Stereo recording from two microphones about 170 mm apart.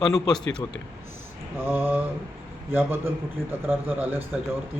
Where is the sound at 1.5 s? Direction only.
15° right (ahead or behind).